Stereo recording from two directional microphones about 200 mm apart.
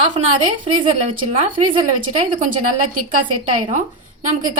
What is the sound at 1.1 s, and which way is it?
Speech, 40° right (ahead or behind).